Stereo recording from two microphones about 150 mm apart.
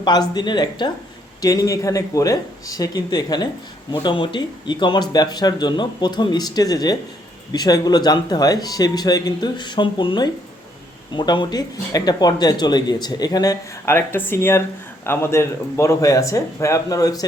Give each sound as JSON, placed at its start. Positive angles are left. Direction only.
{"t": 0.0, "sound": "speech", "side_deg": 25}